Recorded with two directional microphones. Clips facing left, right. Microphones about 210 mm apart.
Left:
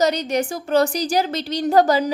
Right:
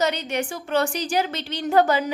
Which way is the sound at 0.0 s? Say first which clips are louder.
Left 5 dB; 40° left (ahead or behind).